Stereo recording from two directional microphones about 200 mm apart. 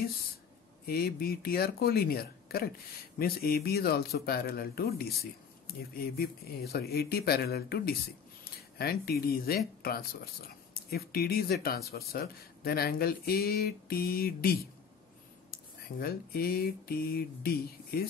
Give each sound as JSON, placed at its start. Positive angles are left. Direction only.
{"t": 0.8, "sound": "speech", "side_deg": 50}